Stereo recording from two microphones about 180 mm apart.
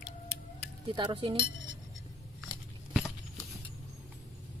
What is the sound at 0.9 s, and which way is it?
Cutlery, 25° right (ahead or behind).